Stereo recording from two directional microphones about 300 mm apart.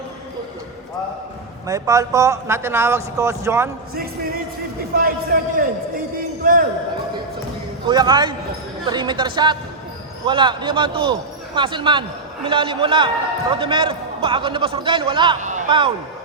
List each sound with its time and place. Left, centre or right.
1.6 s a man's voice: centre
3.9 s a man's voice: right
7.9 s a man's voice: centre